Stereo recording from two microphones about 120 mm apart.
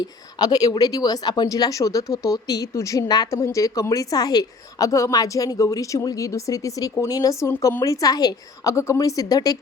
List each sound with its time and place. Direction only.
0.0 s speech: 35° left (ahead or behind)